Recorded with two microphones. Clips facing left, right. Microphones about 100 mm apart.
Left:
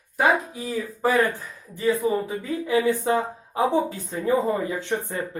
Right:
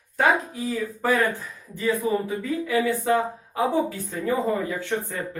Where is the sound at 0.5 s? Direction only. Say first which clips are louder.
Right 1 dB; 15° left (ahead or behind).